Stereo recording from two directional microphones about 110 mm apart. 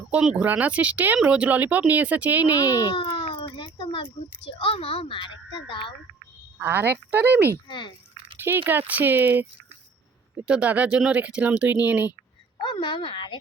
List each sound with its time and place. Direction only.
0.1 s speech: 10° right (ahead or behind)
2.6 s a sound: 35° left (ahead or behind)
4.5 s speech: 60° left (ahead or behind)
6.6 s speech: 20° right (ahead or behind)
7.7 s speech: 45° left (ahead or behind)
8.4 s speech: 20° right (ahead or behind)
12.5 s speech: 50° left (ahead or behind)